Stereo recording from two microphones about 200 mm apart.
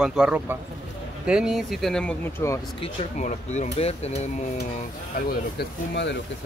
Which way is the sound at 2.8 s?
35° left (ahead or behind).